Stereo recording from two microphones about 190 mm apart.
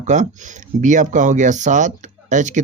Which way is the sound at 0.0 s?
40° right (ahead or behind).